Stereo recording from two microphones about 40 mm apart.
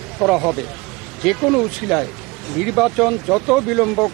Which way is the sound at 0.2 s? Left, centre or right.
Centre.